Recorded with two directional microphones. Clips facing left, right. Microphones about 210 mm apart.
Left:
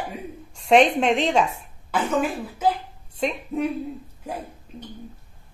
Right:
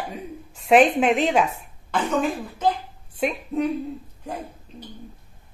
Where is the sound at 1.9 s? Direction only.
5° left (ahead or behind).